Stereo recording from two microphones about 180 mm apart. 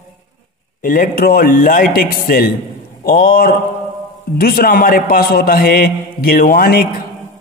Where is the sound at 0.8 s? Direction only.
50° left (ahead or behind).